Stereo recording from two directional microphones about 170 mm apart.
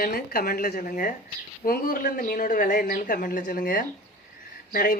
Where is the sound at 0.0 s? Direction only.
60° left (ahead or behind).